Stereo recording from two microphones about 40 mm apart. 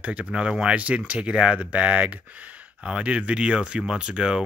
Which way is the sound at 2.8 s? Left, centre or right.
Right.